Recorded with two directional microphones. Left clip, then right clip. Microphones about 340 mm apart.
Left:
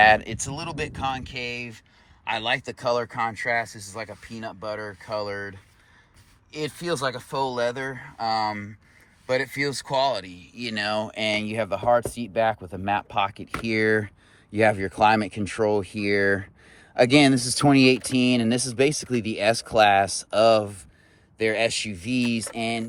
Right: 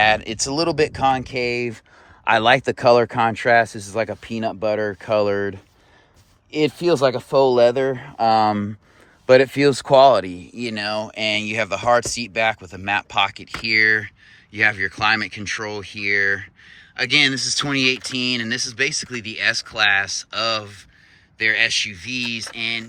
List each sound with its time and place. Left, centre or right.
0.0 s speech: centre
1.2 s speech: right
3.1 s speech: right
10.6 s speech: centre